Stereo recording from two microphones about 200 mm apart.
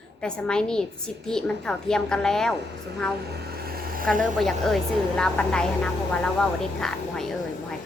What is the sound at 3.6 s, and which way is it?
Vehicle, 50° right (ahead or behind).